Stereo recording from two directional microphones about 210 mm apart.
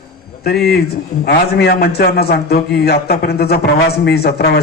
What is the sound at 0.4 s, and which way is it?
A man's voice, 50° left (ahead or behind).